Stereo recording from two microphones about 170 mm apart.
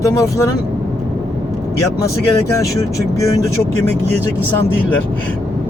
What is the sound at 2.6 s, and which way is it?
Speech, 20° left (ahead or behind).